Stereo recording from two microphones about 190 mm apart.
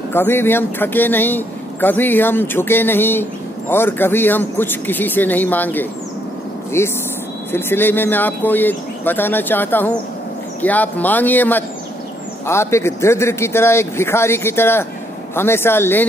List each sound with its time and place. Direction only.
0.1 s speech: 10° left (ahead or behind)